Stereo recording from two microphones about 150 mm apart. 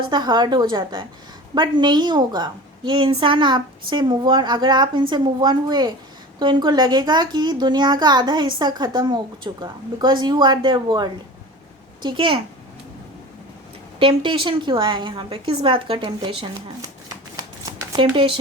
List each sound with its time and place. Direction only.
0.0 s a child's voice: 30° right (ahead or behind)
14.0 s a woman's voice: 35° right (ahead or behind)
17.3 s shuffling cards: 30° right (ahead or behind)